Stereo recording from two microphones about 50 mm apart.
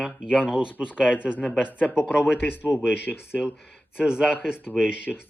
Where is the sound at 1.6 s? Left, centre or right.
Left.